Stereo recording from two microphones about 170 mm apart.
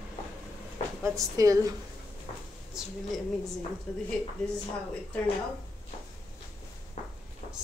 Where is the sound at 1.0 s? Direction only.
20° right (ahead or behind).